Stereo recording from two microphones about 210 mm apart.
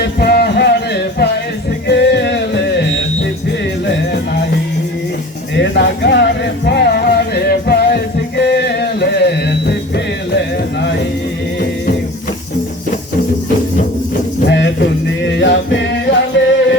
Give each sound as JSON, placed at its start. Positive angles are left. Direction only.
{"t": 0.0, "sound": "a sound", "side_deg": 50}
{"t": 1.9, "sound": "music", "side_deg": 55}
{"t": 5.5, "sound": "music", "side_deg": 55}
{"t": 14.4, "sound": "music", "side_deg": 55}